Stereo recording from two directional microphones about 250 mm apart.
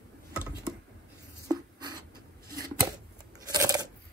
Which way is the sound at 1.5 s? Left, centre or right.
Centre.